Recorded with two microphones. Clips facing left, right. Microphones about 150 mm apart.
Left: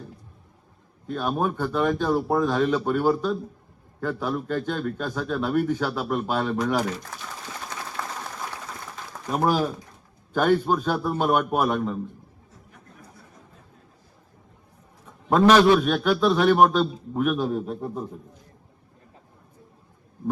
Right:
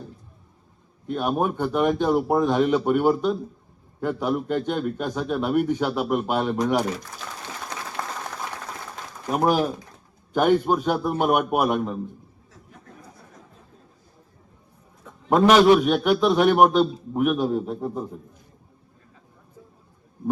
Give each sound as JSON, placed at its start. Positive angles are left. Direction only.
{"t": 1.0, "sound": "speech", "side_deg": -15}
{"t": 9.3, "sound": "speech", "side_deg": -15}
{"t": 15.3, "sound": "speech", "side_deg": -15}